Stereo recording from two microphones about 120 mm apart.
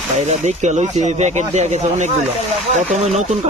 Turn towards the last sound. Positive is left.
turn(degrees=-70)  # may be behind; listen again after turning